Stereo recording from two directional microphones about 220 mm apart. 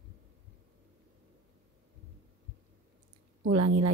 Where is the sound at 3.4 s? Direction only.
90° right.